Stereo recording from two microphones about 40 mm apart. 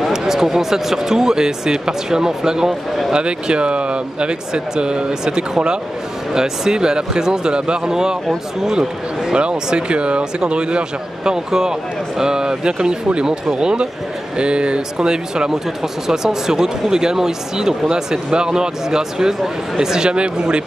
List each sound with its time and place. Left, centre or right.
0.1 s speech: centre